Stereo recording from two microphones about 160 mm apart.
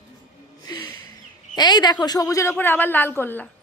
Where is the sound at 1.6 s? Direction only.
25° left (ahead or behind).